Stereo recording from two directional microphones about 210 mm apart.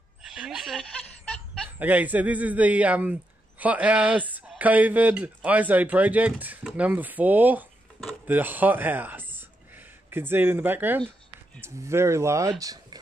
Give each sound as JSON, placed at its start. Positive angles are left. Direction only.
{"t": 0.2, "sound": "a sound", "side_deg": 0}
{"t": 1.3, "sound": "fowl", "side_deg": 5}
{"t": 1.8, "sound": "speech", "side_deg": -10}